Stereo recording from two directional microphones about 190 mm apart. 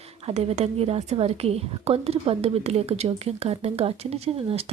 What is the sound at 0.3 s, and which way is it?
A woman's voice, 35° right (ahead or behind).